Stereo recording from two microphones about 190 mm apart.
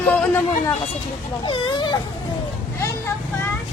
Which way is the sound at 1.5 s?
25° left (ahead or behind).